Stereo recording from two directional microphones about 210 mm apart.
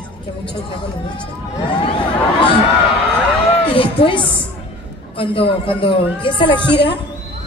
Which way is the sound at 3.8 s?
25° left (ahead or behind).